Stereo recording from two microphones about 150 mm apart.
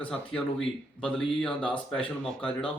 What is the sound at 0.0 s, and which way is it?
Speech, 5° left (ahead or behind).